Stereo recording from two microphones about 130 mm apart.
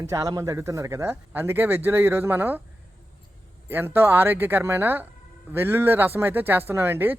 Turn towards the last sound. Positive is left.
turn(degrees=-15)  # may be behind; listen again after turning